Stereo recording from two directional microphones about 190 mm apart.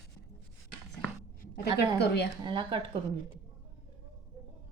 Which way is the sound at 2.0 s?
60° left (ahead or behind).